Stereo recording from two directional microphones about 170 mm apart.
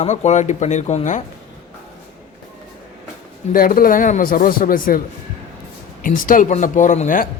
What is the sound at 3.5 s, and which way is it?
A man's voice, 60° left (ahead or behind).